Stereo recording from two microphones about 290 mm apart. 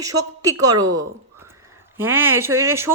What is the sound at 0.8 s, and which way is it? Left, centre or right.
Speech, right.